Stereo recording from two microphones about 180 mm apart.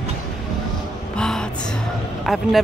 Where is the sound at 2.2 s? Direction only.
Centre (ahead or behind).